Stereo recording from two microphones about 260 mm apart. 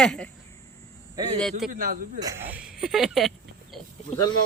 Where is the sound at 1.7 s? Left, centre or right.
Right.